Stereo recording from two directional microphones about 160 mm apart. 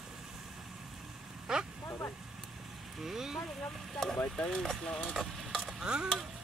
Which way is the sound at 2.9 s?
Centre (ahead or behind).